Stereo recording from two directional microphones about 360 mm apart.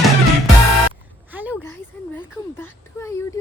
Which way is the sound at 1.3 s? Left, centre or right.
Centre.